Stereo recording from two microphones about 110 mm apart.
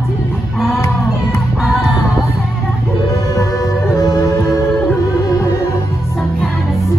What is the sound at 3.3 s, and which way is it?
Music, 35° left (ahead or behind).